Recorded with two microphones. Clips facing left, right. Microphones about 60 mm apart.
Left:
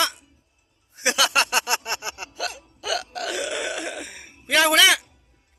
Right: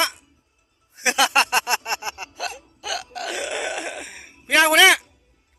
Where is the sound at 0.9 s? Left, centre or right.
Right.